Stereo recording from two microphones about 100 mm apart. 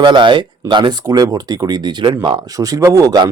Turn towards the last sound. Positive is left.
turn(degrees=-40)  # may be behind; listen again after turning